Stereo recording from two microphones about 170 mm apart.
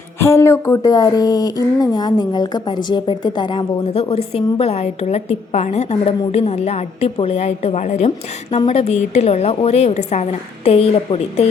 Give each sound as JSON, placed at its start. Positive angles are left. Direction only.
{"t": 0.2, "sound": "speech", "side_deg": 15}